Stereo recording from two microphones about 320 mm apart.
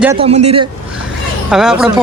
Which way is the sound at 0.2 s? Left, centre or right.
Centre.